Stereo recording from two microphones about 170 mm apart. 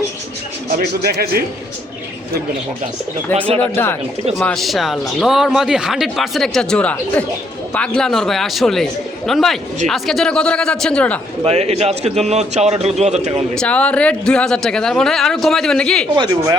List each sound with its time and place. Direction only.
0.8 s speech: 65° right (ahead or behind)
3.2 s speech: 10° left (ahead or behind)
11.4 s a man's voice: 40° right (ahead or behind)
13.5 s speech: 5° left (ahead or behind)
16.1 s speech: 25° right (ahead or behind)